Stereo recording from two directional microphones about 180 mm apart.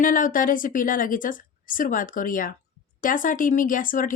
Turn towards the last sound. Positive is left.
turn(degrees=50)  # may be behind; listen again after turning